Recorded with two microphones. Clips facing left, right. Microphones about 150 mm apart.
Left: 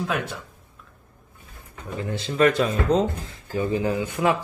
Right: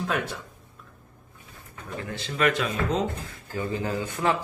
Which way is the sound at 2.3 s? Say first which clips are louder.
Left 5 dB; 35° left (ahead or behind).